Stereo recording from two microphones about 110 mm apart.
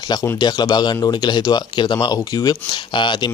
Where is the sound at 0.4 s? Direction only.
40° left (ahead or behind).